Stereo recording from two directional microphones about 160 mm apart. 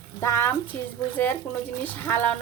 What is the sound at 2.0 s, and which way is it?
Speech, 10° left (ahead or behind).